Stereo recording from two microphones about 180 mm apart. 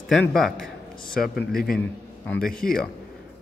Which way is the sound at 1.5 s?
55° left (ahead or behind).